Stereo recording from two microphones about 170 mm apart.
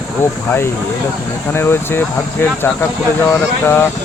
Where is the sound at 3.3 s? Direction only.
15° left (ahead or behind).